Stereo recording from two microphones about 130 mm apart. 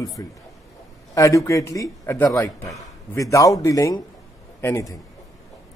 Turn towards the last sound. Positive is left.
turn(degrees=20)  # may be behind; listen again after turning